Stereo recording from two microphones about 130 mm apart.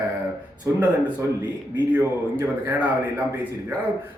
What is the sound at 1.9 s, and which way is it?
A man's voice, 15° right (ahead or behind).